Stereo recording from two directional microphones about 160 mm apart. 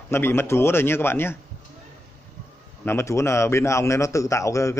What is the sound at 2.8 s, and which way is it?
Speech, 15° left (ahead or behind).